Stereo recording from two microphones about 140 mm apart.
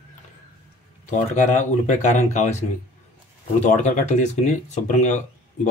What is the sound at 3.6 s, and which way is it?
Speech, 60° left (ahead or behind).